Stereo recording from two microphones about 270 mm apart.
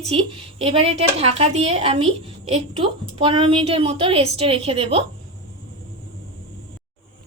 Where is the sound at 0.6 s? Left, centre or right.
Right.